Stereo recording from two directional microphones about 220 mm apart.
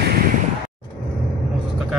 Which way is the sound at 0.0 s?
45° right (ahead or behind).